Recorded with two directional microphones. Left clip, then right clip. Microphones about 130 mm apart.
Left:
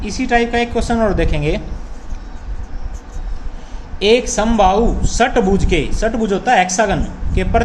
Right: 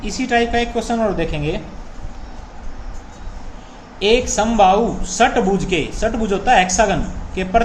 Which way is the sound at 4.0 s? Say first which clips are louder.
Left 2 dB; 40° left (ahead or behind).